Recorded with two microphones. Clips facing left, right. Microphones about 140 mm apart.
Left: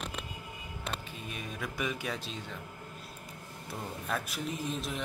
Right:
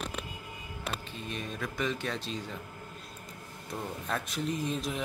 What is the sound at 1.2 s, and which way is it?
A man's voice, 10° left (ahead or behind).